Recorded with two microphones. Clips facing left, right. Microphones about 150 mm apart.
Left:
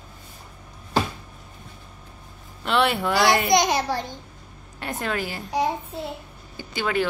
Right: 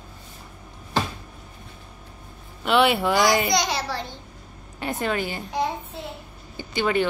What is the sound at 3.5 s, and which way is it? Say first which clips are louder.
Speech: left 4 dB; 50° left (ahead or behind).